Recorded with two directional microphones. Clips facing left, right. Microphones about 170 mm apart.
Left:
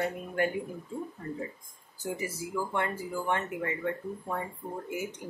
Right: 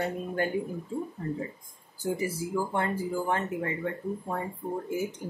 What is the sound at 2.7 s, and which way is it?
Speech, 35° right (ahead or behind).